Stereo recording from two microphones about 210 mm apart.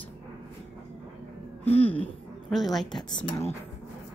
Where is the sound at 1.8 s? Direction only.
10° left (ahead or behind).